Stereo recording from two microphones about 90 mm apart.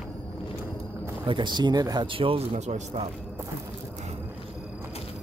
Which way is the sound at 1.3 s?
60° right (ahead or behind).